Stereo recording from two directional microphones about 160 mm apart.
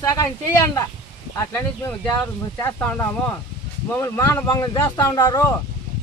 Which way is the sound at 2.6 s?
15° left (ahead or behind).